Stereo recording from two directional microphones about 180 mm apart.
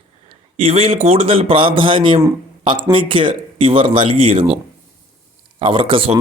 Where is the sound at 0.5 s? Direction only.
35° right (ahead or behind).